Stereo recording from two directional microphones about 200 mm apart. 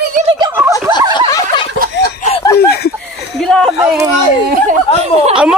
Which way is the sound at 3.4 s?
Centre (ahead or behind).